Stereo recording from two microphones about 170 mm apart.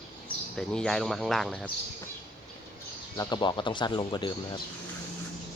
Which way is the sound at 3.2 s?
25° left (ahead or behind).